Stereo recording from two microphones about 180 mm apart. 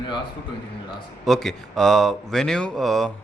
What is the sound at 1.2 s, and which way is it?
Speech, centre (ahead or behind).